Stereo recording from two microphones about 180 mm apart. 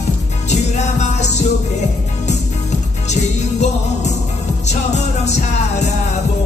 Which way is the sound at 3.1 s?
40° left (ahead or behind).